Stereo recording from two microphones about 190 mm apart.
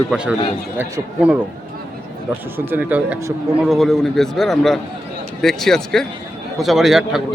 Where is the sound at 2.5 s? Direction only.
10° right (ahead or behind).